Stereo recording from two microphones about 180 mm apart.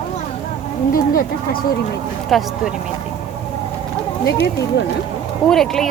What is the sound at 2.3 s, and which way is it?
Speech, centre (ahead or behind).